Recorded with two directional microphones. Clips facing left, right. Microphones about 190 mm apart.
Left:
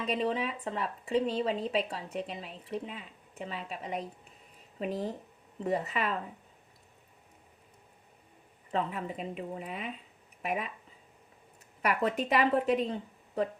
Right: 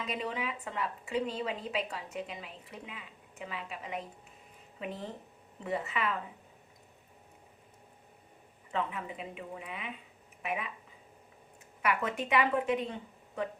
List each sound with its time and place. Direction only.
0.1 s a woman's voice: 30° left (ahead or behind)
8.7 s a woman's voice: 35° left (ahead or behind)
11.8 s a woman's voice: 35° left (ahead or behind)